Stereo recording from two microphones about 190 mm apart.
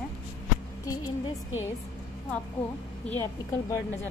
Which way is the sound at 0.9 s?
15° left (ahead or behind).